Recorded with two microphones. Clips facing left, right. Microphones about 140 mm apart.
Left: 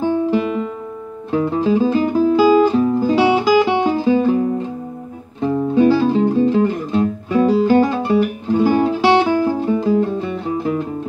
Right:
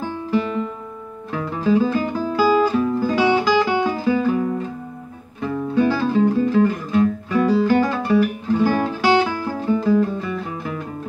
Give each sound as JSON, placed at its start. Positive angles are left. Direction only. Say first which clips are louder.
{"t": 1.3, "sound": "music", "louder": "left 3 dB", "side_deg": 25}